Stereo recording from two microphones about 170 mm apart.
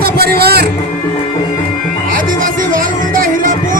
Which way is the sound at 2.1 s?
55° right (ahead or behind).